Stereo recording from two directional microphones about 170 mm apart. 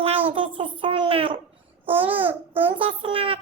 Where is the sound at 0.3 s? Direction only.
30° right (ahead or behind).